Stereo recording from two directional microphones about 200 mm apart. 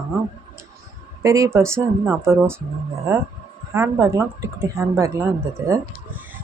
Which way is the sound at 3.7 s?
10° right (ahead or behind).